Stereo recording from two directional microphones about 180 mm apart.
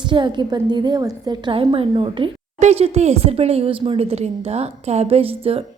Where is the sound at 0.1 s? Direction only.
25° right (ahead or behind).